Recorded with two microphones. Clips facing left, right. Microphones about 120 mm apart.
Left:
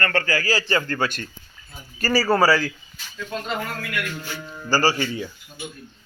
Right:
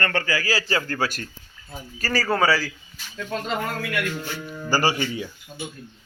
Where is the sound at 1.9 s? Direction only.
5° left (ahead or behind).